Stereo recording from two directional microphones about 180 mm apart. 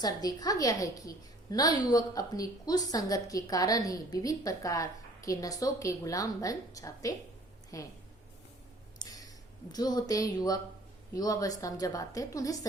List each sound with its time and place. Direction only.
0.0 s a woman's voice: 20° left (ahead or behind)
9.0 s a sound: 20° left (ahead or behind)
9.7 s a woman's voice: 20° left (ahead or behind)